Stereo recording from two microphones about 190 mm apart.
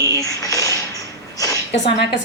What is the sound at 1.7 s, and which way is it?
Speech, 70° left (ahead or behind).